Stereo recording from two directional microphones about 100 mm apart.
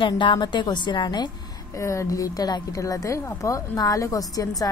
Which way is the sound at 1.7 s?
30° left (ahead or behind).